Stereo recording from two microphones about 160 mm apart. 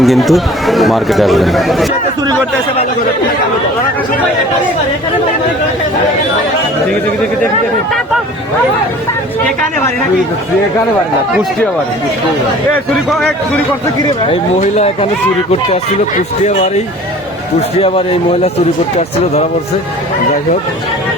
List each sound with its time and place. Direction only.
0.0 s speech: centre (ahead or behind)
13.1 s speech: centre (ahead or behind)
15.7 s a man's voice: 45° left (ahead or behind)